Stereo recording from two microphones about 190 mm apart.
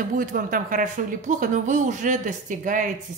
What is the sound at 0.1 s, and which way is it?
A woman's voice, 45° right (ahead or behind).